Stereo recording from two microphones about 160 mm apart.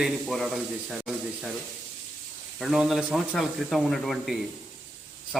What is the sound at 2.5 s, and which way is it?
Speech, centre (ahead or behind).